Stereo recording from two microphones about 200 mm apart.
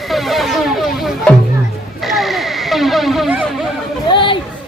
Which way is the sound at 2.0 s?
Centre (ahead or behind).